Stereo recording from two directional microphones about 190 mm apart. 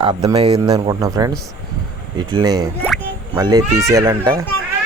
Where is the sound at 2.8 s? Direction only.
10° left (ahead or behind).